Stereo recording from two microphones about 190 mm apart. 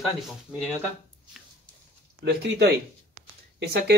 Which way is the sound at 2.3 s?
55° right (ahead or behind).